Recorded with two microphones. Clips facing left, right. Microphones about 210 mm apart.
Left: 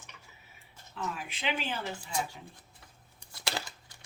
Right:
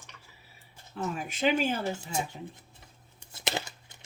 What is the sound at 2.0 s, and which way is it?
Speech, 25° right (ahead or behind).